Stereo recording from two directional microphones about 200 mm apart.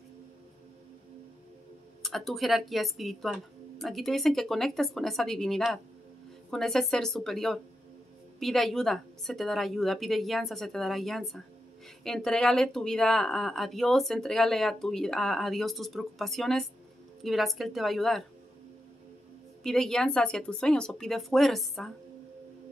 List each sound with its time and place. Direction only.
2.0 s speech: centre (ahead or behind)
19.6 s speech: centre (ahead or behind)